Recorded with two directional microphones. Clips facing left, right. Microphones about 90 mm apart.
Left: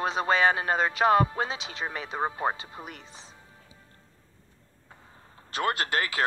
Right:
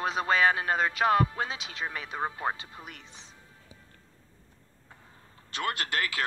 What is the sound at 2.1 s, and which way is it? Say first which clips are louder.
Speech: left 4 dB; 20° left (ahead or behind).